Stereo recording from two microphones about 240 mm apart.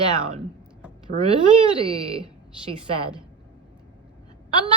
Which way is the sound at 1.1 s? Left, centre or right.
Right.